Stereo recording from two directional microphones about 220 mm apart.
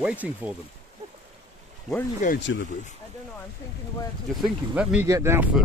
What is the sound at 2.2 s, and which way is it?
Speech, 35° left (ahead or behind).